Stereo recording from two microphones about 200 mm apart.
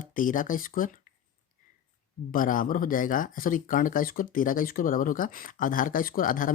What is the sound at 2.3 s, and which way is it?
Speech, 45° left (ahead or behind).